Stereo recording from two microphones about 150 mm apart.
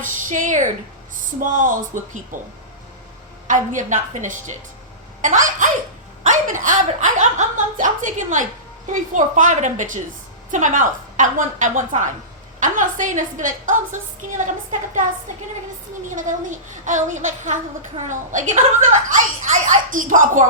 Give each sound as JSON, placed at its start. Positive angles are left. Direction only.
{"t": 0.0, "sound": "a woman's voice", "side_deg": -60}
{"t": 3.4, "sound": "a woman's voice", "side_deg": -55}
{"t": 16.0, "sound": "a woman's voice", "side_deg": -60}